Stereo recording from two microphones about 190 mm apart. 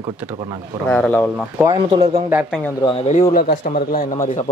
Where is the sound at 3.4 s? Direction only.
50° left (ahead or behind).